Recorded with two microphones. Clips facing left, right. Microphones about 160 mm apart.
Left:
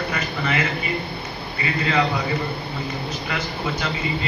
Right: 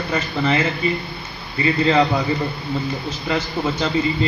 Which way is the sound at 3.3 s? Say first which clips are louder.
Right 8 dB; 30° right (ahead or behind).